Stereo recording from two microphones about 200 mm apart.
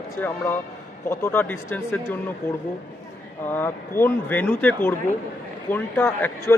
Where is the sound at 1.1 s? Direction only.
10° left (ahead or behind).